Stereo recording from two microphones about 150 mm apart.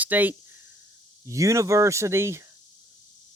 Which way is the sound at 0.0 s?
10° right (ahead or behind).